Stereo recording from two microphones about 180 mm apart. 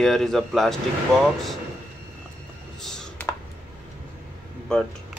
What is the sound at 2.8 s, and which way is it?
Clicking, centre (ahead or behind).